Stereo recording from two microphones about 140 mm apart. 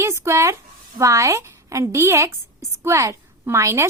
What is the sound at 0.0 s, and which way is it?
A woman's voice, 20° right (ahead or behind).